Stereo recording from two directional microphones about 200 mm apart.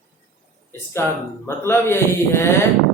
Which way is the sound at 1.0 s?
10° left (ahead or behind).